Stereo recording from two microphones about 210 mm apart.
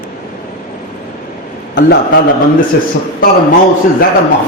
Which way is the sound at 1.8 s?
55° left (ahead or behind).